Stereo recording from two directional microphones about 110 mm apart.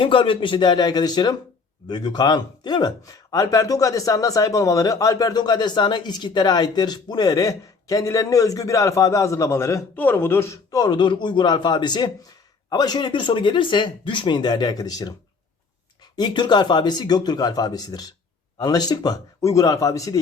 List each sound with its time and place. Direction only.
0.0 s speech: 50° left (ahead or behind); by 9.8 s 25° left (ahead or behind)
9.9 s a man's voice: 15° left (ahead or behind)
10.7 s speech: 35° left (ahead or behind)
16.1 s speech: 45° left (ahead or behind)